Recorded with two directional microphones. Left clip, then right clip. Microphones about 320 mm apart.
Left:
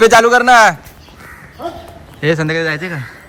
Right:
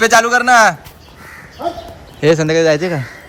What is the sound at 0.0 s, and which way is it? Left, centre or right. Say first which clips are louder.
Speech: left 3 dB; centre.